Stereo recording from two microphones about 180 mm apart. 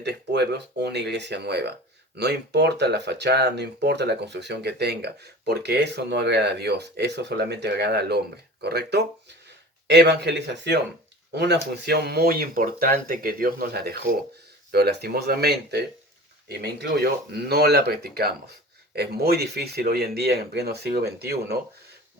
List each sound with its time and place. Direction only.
0.0 s speech: 65° right (ahead or behind)